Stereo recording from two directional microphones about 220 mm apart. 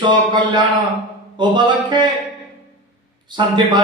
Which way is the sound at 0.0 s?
20° right (ahead or behind).